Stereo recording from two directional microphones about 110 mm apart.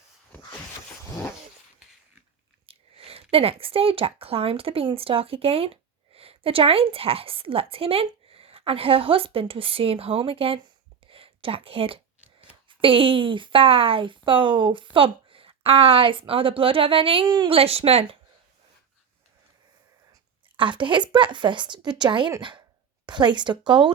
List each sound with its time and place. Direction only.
2.6 s speech: 60° right (ahead or behind)
11.0 s a sound: 55° right (ahead or behind)
12.6 s a woman's voice: 55° right (ahead or behind)
17.2 s a woman's voice: 45° right (ahead or behind); by 18.2 s 65° right (ahead or behind)
20.6 s speech: 45° right (ahead or behind)